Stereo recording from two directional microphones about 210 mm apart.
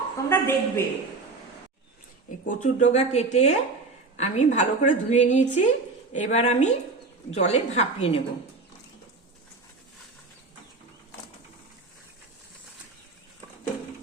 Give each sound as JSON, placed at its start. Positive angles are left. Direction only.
{"t": 0.3, "sound": "a woman's voice", "side_deg": 10}
{"t": 2.4, "sound": "a woman's voice", "side_deg": 40}